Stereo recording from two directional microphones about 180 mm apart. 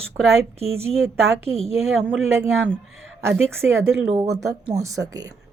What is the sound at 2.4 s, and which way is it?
Speech, 10° right (ahead or behind).